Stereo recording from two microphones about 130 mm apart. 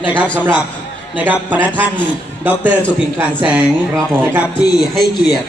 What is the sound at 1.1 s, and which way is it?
A man's voice, 15° right (ahead or behind).